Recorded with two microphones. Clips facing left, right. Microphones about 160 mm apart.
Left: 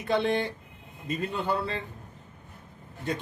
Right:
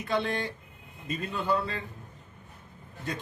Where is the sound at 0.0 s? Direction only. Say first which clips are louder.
Left 4 dB; 25° left (ahead or behind).